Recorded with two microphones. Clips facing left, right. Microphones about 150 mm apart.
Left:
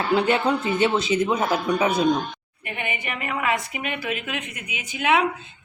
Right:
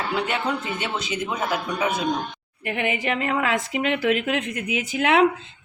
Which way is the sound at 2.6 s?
90° right.